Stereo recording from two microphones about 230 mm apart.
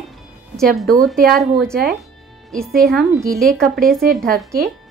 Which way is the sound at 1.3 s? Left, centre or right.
Centre.